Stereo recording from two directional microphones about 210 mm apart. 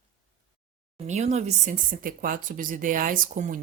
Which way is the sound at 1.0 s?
30° right (ahead or behind).